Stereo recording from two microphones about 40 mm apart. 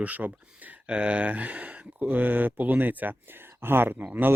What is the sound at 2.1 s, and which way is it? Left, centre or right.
Speech, right.